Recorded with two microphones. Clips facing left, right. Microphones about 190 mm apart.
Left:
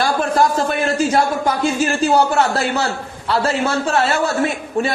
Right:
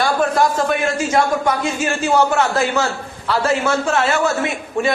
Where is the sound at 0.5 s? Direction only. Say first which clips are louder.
Even; 35° left (ahead or behind).